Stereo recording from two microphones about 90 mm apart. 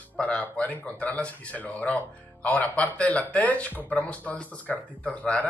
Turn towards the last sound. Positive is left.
turn(degrees=15)  # may be behind; listen again after turning